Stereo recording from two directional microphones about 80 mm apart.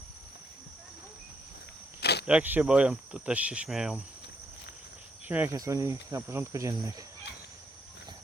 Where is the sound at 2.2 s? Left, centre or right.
Centre.